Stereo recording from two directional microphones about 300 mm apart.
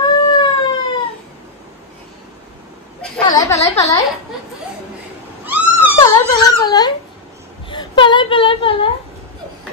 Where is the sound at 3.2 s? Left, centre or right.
Centre.